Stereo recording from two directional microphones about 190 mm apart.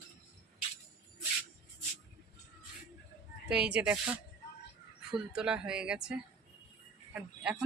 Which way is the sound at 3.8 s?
5° right (ahead or behind).